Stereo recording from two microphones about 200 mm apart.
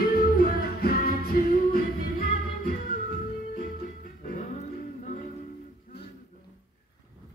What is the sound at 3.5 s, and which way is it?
Music, 40° left (ahead or behind).